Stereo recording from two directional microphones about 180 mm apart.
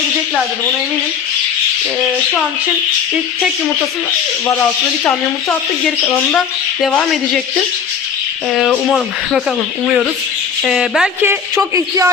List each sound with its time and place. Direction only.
5.0 s speech: 10° left (ahead or behind); by 12.1 s 15° right (ahead or behind)